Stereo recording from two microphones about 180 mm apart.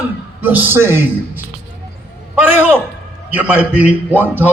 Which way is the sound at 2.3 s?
10° right (ahead or behind).